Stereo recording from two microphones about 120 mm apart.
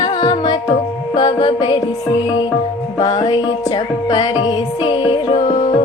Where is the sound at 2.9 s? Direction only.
35° left (ahead or behind).